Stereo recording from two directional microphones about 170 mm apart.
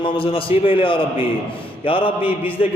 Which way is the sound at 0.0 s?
30° left (ahead or behind).